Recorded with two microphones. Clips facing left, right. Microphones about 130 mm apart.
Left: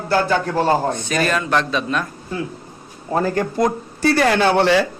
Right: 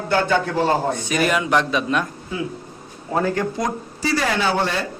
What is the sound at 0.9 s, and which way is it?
A man's voice, 15° right (ahead or behind).